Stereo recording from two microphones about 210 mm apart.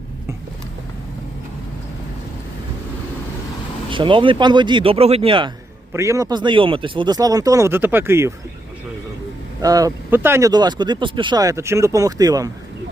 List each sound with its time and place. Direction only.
3.8 s speech: 25° right (ahead or behind)
5.9 s speech: 15° right (ahead or behind)
9.6 s speech: 15° right (ahead or behind)